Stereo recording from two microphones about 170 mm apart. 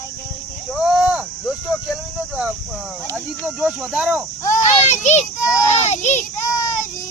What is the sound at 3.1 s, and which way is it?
Cricket, 5° right (ahead or behind).